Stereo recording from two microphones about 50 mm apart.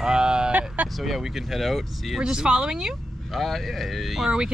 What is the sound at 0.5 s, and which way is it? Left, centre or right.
Vehicle, right.